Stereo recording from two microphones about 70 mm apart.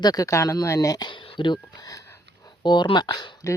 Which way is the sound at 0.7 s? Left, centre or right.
Left.